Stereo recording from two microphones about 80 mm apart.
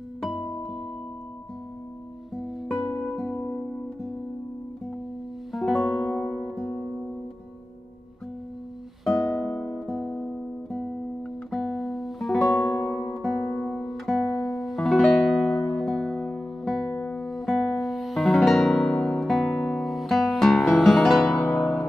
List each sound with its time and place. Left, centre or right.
0.2 s music: centre
2.7 s music: centre
3.3 s music: centre
5.5 s music: centre
9.0 s music: centre
11.5 s guitar: centre
12.5 s music: centre
13.1 s music: centre